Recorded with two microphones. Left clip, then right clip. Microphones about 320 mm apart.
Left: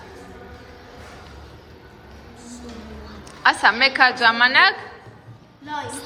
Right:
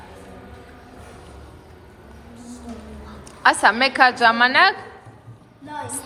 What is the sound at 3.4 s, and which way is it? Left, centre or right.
A woman's voice, centre.